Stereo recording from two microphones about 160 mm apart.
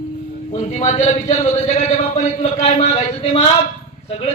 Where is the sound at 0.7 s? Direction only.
45° left (ahead or behind).